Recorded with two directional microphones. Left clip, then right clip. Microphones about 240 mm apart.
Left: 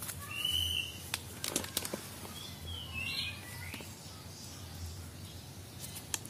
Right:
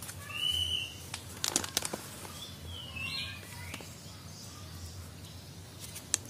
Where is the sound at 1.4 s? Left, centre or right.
Centre.